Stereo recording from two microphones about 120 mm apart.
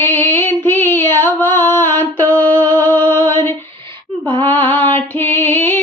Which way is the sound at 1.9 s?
15° left (ahead or behind).